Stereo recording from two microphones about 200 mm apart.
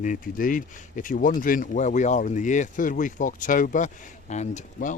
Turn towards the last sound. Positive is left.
turn(degrees=40)  # may be behind; listen again after turning